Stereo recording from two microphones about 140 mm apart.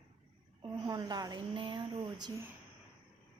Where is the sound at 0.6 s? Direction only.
30° right (ahead or behind).